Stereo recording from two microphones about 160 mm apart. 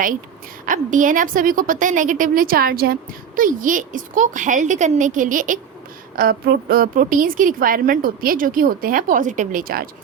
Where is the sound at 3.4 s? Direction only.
55° right (ahead or behind).